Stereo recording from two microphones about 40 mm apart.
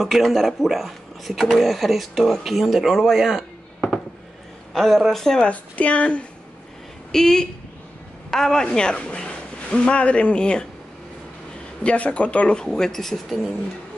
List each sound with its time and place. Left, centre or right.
0.0 s speech: centre
4.7 s speech: centre
5.5 s speech: left
7.1 s a man's voice: centre
11.8 s speech: left
12.5 s speech: centre